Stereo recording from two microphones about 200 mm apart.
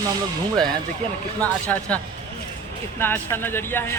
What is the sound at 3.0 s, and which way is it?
Speech, 10° left (ahead or behind).